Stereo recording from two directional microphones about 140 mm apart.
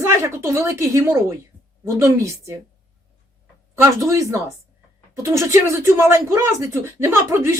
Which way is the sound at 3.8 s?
20° right (ahead or behind).